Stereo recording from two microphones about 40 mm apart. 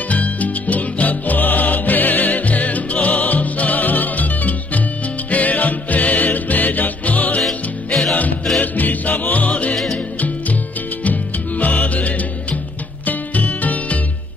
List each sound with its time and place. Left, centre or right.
0.1 s music: left
7.4 s music: centre
8.5 s music: left
11.1 s music: left